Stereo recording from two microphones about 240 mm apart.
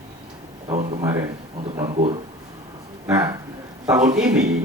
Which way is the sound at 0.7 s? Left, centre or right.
Right.